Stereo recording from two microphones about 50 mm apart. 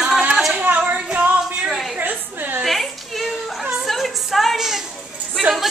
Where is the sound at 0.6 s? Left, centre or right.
Right.